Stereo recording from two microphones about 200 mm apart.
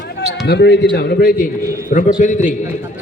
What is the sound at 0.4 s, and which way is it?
A man's voice, 55° left (ahead or behind).